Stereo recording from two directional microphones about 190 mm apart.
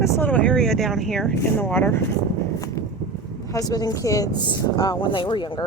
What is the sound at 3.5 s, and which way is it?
Speech, 20° left (ahead or behind).